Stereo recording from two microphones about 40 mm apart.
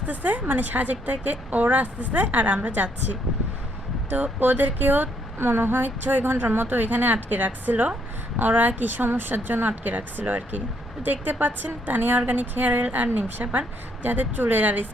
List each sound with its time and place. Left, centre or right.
0.1 s a woman's voice: right
5.4 s a woman's voice: right